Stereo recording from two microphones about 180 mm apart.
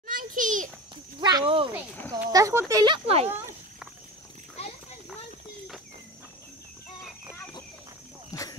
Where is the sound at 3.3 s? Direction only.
10° right (ahead or behind).